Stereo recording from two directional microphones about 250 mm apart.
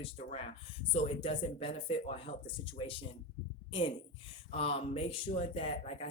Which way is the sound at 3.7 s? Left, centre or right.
Left.